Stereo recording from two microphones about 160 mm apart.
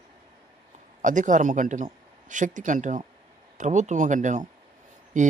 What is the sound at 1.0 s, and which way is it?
Speech, 55° right (ahead or behind).